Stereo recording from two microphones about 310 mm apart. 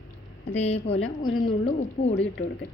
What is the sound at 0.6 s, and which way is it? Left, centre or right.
Speech, centre.